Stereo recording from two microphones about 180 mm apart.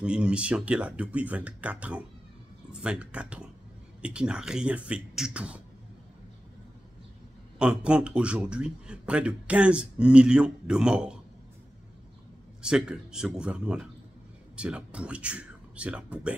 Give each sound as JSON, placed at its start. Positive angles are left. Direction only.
{"t": 0.0, "sound": "a man's voice", "side_deg": -5}
{"t": 7.5, "sound": "a man's voice", "side_deg": -5}
{"t": 12.6, "sound": "a man's voice", "side_deg": -5}